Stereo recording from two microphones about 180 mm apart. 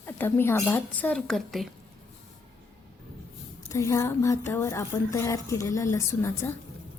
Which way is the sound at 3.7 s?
15° left (ahead or behind).